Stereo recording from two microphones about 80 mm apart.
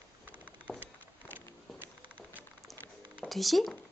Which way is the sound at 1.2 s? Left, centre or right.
Left.